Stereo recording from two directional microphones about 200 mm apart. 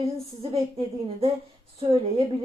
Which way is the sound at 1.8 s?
30° right (ahead or behind).